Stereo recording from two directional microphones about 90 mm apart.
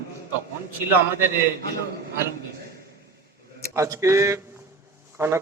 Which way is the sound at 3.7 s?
35° right (ahead or behind).